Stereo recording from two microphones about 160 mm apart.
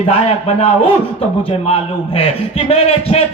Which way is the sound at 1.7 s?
40° left (ahead or behind).